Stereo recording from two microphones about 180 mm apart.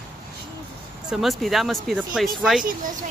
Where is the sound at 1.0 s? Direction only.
Centre (ahead or behind).